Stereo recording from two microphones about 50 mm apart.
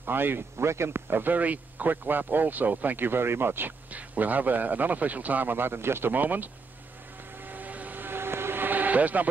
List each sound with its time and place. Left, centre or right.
0.0 s speech: right
0.7 s speech: right
3.9 s speech: right
7.4 s vehicle: right